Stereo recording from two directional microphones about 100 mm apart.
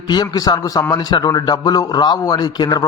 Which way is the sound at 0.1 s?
40° left (ahead or behind).